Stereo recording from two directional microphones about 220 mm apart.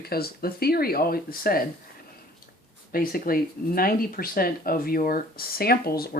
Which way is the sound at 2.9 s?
40° left (ahead or behind).